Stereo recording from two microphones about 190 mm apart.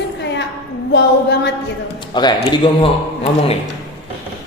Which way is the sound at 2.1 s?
25° left (ahead or behind).